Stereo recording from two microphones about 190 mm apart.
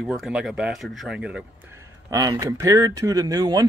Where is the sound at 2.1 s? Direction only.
20° right (ahead or behind).